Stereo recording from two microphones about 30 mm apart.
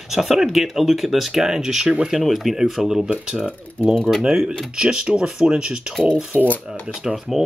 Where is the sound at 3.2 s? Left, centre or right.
Right.